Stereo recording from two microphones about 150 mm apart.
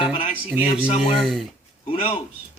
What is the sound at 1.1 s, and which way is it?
Speech, centre (ahead or behind).